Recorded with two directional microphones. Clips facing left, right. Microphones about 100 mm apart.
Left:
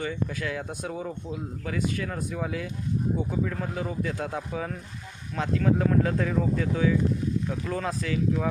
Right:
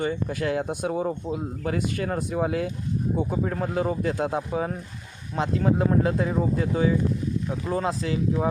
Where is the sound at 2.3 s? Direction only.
50° right (ahead or behind).